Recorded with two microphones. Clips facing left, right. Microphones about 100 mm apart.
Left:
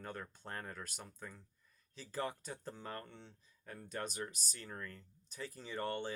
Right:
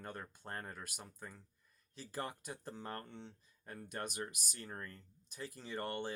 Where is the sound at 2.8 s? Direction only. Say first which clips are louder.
Right 3 dB; 25° right (ahead or behind).